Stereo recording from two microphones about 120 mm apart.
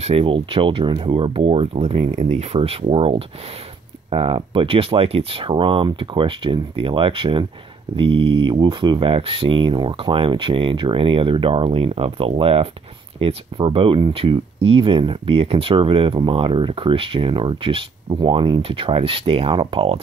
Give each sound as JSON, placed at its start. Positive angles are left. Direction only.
{"t": 0.0, "sound": "speech", "side_deg": -50}